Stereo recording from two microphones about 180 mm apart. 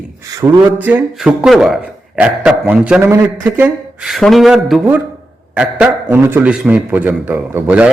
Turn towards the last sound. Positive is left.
turn(degrees=-10)  # may be behind; listen again after turning